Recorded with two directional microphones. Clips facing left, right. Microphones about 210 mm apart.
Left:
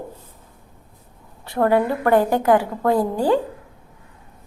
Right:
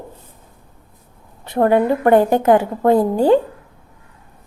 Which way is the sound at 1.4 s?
20° right (ahead or behind).